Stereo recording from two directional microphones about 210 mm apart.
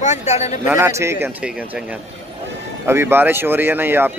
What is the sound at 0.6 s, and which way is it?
Speech, 10° right (ahead or behind).